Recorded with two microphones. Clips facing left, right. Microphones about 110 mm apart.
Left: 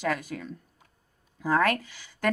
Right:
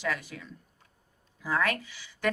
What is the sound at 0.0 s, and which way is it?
A woman's voice, 45° left (ahead or behind).